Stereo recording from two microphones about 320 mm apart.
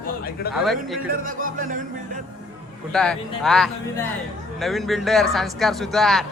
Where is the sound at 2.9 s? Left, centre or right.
Centre.